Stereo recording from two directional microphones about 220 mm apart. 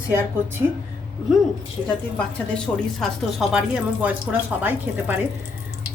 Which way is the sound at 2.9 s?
Centre (ahead or behind).